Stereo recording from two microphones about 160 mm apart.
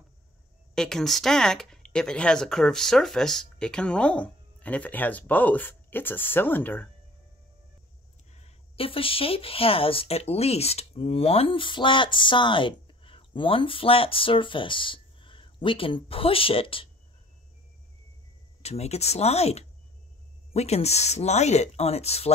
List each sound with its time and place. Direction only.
0.7 s speech: 5° left (ahead or behind)
8.3 s speech: 45° left (ahead or behind)
18.6 s speech: 40° left (ahead or behind)